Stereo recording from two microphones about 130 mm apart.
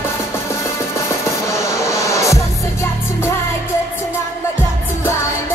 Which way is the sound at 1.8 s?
25° left (ahead or behind).